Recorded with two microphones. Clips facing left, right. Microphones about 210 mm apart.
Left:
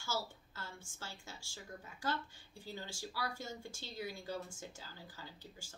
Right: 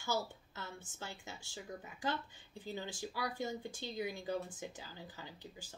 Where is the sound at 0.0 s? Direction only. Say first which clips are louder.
Right 3 dB; 20° right (ahead or behind).